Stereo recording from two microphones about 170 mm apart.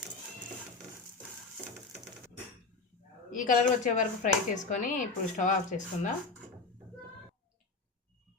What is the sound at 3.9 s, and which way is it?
Speech, 50° left (ahead or behind).